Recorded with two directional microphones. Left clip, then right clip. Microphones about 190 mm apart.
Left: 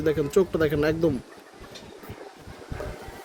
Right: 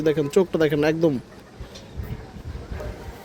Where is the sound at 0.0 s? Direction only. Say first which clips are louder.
Right 2 dB; 20° right (ahead or behind).